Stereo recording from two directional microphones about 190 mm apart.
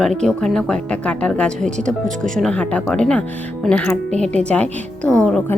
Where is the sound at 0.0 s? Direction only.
5° left (ahead or behind).